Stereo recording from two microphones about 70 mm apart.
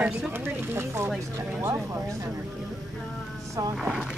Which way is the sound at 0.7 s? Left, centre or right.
Right.